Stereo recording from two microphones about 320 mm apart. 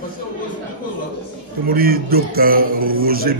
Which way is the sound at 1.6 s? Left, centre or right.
Right.